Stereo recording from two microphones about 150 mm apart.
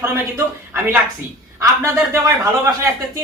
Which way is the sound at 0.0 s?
15° right (ahead or behind).